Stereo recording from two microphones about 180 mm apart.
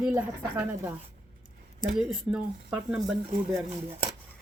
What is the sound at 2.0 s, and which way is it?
Speech, 5° right (ahead or behind).